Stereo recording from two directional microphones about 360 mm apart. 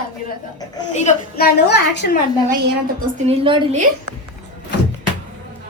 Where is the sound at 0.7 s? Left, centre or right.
Centre.